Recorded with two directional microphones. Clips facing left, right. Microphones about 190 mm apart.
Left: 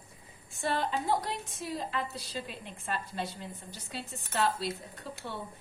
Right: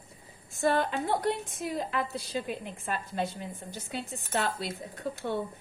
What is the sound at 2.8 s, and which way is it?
A woman's voice, 50° right (ahead or behind).